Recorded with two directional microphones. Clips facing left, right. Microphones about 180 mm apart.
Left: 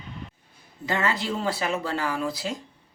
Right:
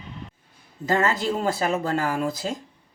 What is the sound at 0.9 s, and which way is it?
Speech, 45° right (ahead or behind).